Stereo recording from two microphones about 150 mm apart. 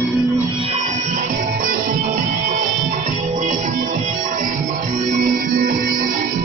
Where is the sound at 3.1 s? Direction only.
55° right (ahead or behind).